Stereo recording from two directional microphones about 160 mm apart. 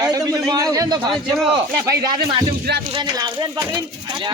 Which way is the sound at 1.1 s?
Centre (ahead or behind).